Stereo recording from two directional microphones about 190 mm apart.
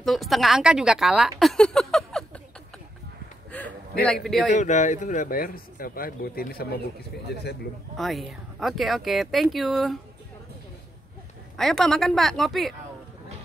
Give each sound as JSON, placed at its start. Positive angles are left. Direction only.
{"t": 0.0, "sound": "speech", "side_deg": 0}
{"t": 1.4, "sound": "a sound", "side_deg": 0}
{"t": 3.5, "sound": "a sound", "side_deg": 5}
{"t": 4.0, "sound": "speech", "side_deg": 5}
{"t": 4.5, "sound": "a man's voice", "side_deg": 40}
{"t": 7.9, "sound": "speech", "side_deg": 0}
{"t": 11.5, "sound": "speech", "side_deg": 0}